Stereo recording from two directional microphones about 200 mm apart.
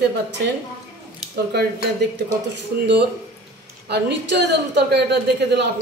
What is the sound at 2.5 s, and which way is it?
Speech, 60° right (ahead or behind).